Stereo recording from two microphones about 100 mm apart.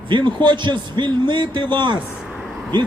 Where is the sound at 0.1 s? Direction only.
50° right (ahead or behind).